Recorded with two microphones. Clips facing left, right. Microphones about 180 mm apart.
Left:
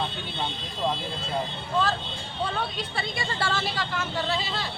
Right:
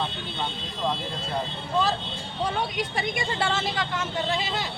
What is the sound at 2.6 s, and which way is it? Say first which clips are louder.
Speech: right 3 dB; 15° right (ahead or behind).